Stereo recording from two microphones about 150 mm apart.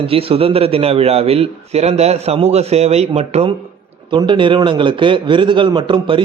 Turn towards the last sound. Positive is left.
turn(degrees=-35)  # may be behind; listen again after turning